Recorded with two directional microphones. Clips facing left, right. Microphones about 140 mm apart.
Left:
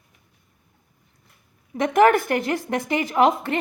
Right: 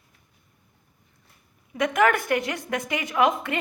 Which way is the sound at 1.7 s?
30° left (ahead or behind).